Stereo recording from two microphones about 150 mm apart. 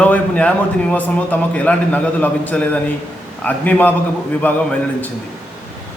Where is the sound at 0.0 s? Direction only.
10° left (ahead or behind).